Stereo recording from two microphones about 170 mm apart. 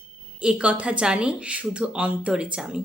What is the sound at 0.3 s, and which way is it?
A woman's voice, 5° right (ahead or behind).